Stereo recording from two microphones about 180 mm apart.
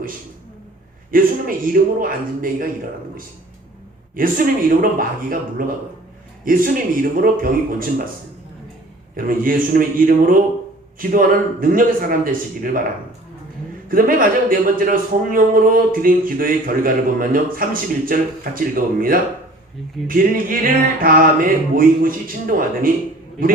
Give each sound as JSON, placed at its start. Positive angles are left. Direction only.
{"t": 1.1, "sound": "a man's voice", "side_deg": -50}
{"t": 4.1, "sound": "a man's voice", "side_deg": -50}
{"t": 9.1, "sound": "a man's voice", "side_deg": -50}
{"t": 11.0, "sound": "a man's voice", "side_deg": -50}
{"t": 13.8, "sound": "a man's voice", "side_deg": -50}